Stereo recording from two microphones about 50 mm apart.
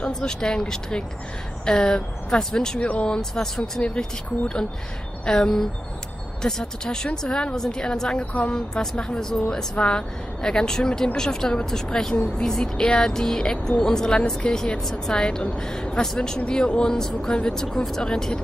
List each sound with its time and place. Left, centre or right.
0.0 s speech: centre
2.8 s speech: left
3.2 s speech: centre
8.3 s speech: left
8.5 s speech: centre